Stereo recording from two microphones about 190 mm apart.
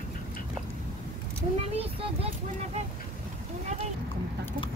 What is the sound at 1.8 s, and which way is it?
Speech, 30° right (ahead or behind).